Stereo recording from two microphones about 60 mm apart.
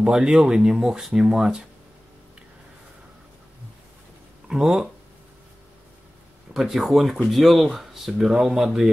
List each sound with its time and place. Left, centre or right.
0.0 s speech: centre
4.5 s speech: centre
6.5 s speech: centre